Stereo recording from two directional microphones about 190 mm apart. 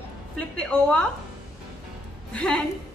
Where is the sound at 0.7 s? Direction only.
5° left (ahead or behind).